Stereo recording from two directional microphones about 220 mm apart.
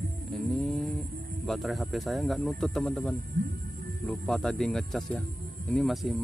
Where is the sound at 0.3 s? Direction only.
5° left (ahead or behind).